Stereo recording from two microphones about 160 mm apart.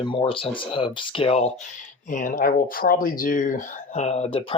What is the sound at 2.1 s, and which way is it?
Speech, 55° left (ahead or behind).